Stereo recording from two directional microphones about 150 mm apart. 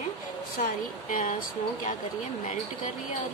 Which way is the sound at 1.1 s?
60° left (ahead or behind).